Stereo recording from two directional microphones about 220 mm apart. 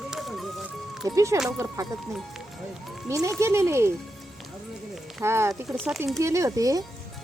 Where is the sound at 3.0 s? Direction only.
15° right (ahead or behind).